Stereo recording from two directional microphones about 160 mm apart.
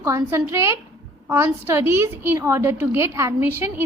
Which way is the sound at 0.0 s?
15° right (ahead or behind).